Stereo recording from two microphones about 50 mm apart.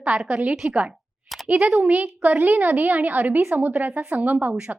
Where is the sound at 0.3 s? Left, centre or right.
Right.